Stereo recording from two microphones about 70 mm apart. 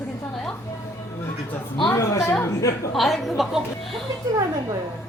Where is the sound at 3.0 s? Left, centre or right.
Centre.